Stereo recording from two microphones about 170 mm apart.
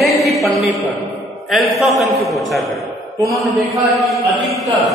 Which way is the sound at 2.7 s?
20° right (ahead or behind).